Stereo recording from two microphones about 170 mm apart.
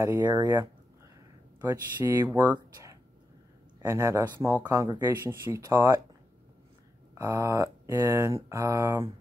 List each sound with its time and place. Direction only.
0.0 s speech: 15° right (ahead or behind)
2.2 s speech: 10° right (ahead or behind)
7.2 s speech: 10° right (ahead or behind)